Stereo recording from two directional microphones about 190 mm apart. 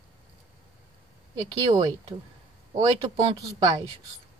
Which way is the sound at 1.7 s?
30° right (ahead or behind).